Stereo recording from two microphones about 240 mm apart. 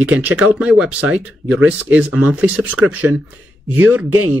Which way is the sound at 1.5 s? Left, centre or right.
Centre.